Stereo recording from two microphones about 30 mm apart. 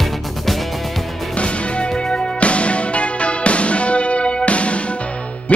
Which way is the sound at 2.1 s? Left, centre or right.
Left.